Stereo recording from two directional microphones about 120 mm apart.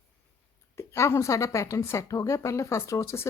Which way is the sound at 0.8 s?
25° left (ahead or behind).